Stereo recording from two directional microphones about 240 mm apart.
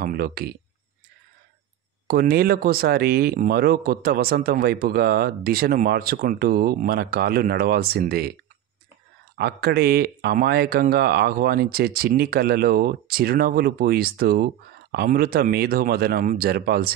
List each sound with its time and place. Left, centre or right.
0.0 s speech: right
2.0 s speech: right
9.4 s speech: right